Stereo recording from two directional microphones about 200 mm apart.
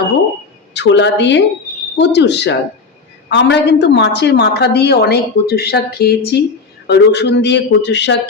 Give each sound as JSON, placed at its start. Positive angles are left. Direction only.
{"t": 0.7, "sound": "a woman's voice", "side_deg": 60}